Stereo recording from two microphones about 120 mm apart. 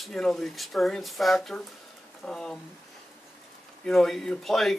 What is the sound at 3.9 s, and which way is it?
Speech, 5° left (ahead or behind).